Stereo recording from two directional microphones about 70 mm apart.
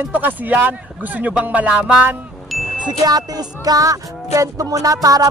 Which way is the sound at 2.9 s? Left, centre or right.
Right.